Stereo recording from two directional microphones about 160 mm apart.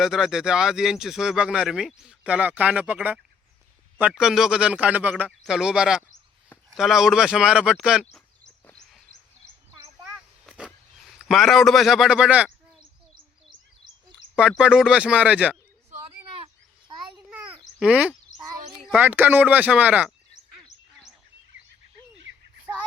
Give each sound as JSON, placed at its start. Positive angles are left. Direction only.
{"t": 0.0, "sound": "a man's voice", "side_deg": -5}
{"t": 8.6, "sound": "wild animals", "side_deg": 5}
{"t": 10.2, "sound": "a sound", "side_deg": -5}
{"t": 11.2, "sound": "speech", "side_deg": 0}
{"t": 14.3, "sound": "speech", "side_deg": -5}
{"t": 17.7, "sound": "a man's voice", "side_deg": -5}